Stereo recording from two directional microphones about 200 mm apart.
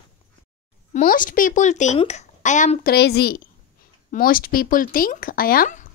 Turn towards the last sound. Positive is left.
turn(degrees=40)  # may be behind; listen again after turning